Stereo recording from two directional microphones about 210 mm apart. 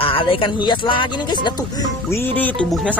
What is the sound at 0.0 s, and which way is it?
Speech, 25° left (ahead or behind).